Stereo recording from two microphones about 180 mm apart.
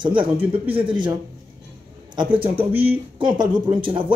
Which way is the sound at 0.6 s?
30° right (ahead or behind).